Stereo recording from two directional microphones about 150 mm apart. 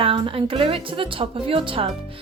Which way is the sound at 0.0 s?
35° right (ahead or behind).